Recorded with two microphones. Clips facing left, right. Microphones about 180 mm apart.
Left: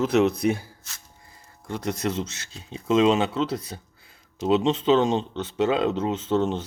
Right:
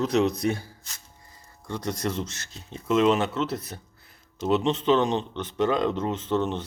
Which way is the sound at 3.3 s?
10° left (ahead or behind).